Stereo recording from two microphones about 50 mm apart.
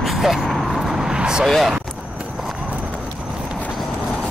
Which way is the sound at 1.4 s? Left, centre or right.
Centre.